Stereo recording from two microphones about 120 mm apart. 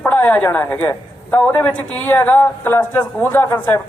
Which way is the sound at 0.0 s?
15° left (ahead or behind).